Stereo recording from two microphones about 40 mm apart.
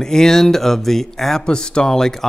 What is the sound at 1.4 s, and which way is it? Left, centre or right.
Speech, left.